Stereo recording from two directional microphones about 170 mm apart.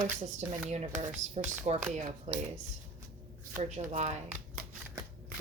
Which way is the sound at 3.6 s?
40° right (ahead or behind).